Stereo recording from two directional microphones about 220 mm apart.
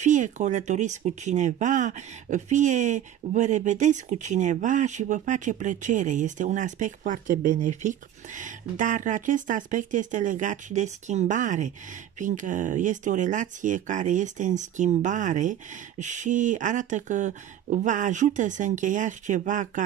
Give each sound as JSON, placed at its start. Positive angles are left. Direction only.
{"t": 0.0, "sound": "speech", "side_deg": -35}